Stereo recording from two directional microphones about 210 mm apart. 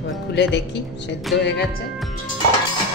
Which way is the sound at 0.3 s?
55° left (ahead or behind).